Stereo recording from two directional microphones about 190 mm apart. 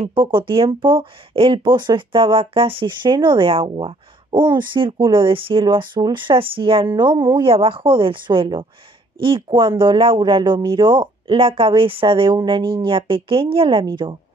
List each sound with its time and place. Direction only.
0.0 s speech: 25° right (ahead or behind)